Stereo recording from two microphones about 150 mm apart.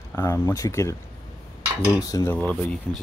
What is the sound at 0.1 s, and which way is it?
Speech, 20° left (ahead or behind).